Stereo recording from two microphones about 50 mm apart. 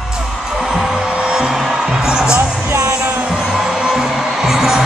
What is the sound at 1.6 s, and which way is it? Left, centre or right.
Music, centre.